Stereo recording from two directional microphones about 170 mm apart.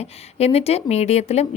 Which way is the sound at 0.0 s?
40° left (ahead or behind).